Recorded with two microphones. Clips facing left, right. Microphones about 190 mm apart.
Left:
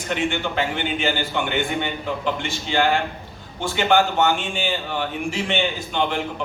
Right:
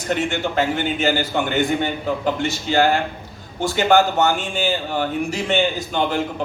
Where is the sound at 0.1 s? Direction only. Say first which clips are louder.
Right 2 dB; 40° right (ahead or behind).